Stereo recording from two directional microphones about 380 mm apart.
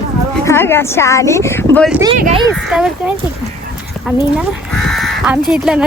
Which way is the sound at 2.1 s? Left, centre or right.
Centre.